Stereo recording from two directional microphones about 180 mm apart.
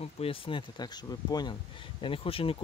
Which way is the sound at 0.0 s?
30° left (ahead or behind).